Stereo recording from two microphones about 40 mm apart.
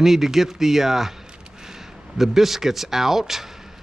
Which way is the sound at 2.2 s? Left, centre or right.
Centre.